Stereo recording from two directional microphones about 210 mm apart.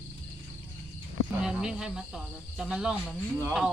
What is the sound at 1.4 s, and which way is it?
Speech, 5° right (ahead or behind).